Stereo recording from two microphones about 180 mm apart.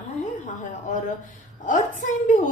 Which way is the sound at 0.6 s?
45° left (ahead or behind).